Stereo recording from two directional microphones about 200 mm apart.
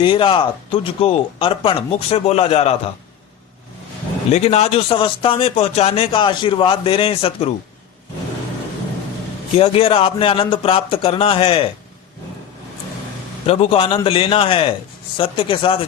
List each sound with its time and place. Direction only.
0.0 s a man's voice: 25° left (ahead or behind)
4.3 s a man's voice: 30° left (ahead or behind)
9.6 s a man's voice: 30° left (ahead or behind)
13.5 s a man's voice: 30° left (ahead or behind)